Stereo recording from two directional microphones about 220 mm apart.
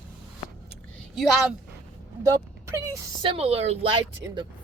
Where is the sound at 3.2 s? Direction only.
25° right (ahead or behind).